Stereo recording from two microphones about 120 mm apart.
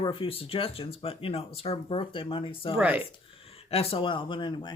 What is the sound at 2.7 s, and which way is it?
Speech, 15° right (ahead or behind).